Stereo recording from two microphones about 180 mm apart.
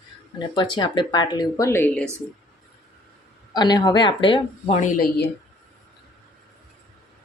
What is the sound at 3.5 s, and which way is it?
Speech, 25° left (ahead or behind).